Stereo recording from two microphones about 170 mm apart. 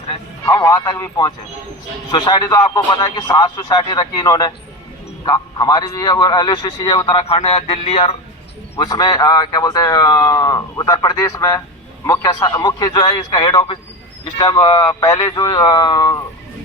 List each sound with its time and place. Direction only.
0.4 s a man's voice: 15° left (ahead or behind); by 8.1 s 35° left (ahead or behind)
8.8 s a man's voice: 25° left (ahead or behind)